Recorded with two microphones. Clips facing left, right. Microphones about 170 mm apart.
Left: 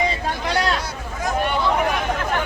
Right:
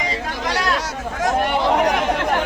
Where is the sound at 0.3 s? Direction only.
90° right.